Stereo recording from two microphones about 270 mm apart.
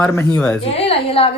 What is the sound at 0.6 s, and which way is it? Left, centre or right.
Speech, left.